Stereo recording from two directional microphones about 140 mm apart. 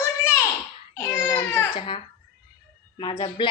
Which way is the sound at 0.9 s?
25° left (ahead or behind).